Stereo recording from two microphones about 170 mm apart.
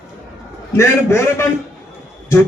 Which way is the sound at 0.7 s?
15° left (ahead or behind).